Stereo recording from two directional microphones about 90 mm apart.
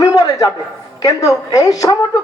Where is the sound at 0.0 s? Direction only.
45° left (ahead or behind).